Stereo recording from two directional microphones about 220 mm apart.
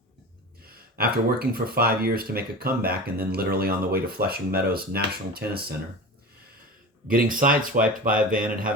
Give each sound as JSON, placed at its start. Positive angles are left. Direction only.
{"t": 0.9, "sound": "speech", "side_deg": -45}
{"t": 7.1, "sound": "speech", "side_deg": -40}